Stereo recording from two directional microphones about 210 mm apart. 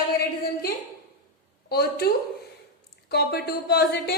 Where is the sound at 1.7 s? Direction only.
50° left (ahead or behind).